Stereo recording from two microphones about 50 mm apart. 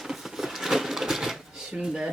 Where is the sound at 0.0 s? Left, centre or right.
Centre.